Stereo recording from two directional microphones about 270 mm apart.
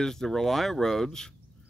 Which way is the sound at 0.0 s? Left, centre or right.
Centre.